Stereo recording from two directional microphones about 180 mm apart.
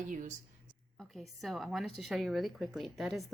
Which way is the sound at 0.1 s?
45° right (ahead or behind).